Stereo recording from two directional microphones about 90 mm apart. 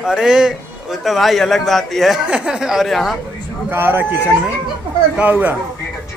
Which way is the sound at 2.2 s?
10° right (ahead or behind).